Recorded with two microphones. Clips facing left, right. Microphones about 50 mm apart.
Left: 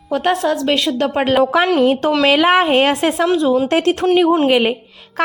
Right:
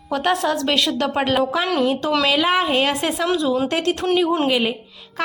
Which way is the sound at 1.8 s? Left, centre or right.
Left.